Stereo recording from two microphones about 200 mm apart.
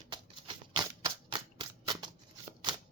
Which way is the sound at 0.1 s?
20° right (ahead or behind).